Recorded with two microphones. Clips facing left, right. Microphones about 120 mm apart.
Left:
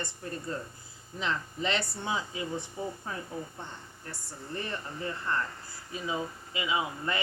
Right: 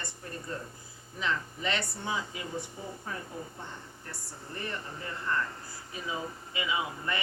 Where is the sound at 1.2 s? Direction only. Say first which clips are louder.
Left 1 dB; 30° left (ahead or behind).